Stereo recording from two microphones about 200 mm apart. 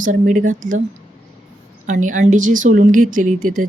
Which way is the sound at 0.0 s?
40° right (ahead or behind).